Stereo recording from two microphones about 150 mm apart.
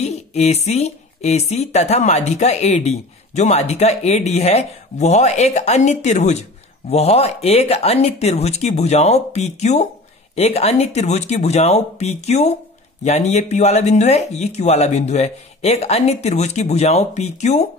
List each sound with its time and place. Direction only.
0.0 s a woman's voice: 45° left (ahead or behind)